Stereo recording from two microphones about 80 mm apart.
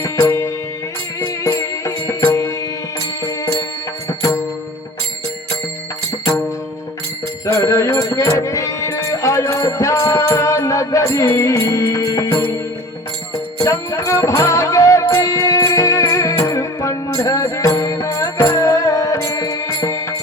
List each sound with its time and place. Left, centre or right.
1.2 s music: left
3.2 s music: left
7.4 s music: left
13.6 s music: left